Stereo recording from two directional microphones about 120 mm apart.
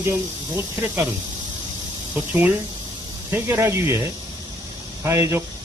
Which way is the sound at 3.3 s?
20° right (ahead or behind).